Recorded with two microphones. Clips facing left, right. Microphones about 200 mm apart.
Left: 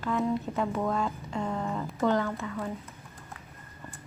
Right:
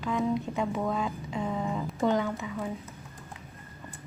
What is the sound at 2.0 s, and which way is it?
Speech, 15° right (ahead or behind).